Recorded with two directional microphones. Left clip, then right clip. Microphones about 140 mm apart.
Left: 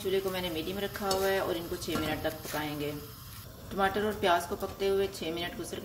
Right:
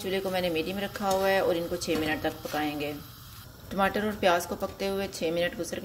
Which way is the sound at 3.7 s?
55° right (ahead or behind).